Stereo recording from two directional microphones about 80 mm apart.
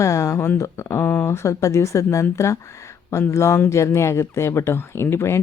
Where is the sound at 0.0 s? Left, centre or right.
Left.